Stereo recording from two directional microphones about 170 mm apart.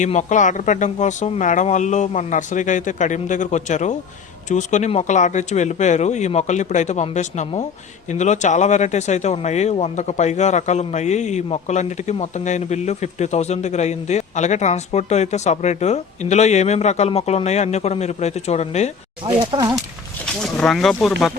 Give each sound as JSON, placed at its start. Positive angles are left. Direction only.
{"t": 0.0, "sound": "speech", "side_deg": 45}
{"t": 19.2, "sound": "speech", "side_deg": -30}
{"t": 20.4, "sound": "speech", "side_deg": 5}